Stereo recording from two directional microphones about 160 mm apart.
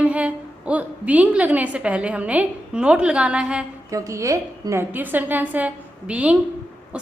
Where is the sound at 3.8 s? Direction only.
20° right (ahead or behind).